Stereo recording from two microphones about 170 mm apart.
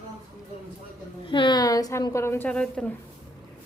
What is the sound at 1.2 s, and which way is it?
A woman's voice, 30° left (ahead or behind).